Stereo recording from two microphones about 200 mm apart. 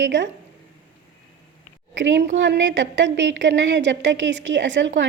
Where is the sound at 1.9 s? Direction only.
65° right (ahead or behind).